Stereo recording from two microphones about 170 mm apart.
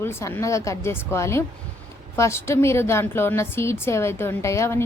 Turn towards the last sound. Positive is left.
turn(degrees=15)  # may be behind; listen again after turning